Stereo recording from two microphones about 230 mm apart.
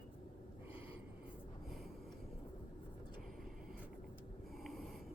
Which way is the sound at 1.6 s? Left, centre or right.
Centre.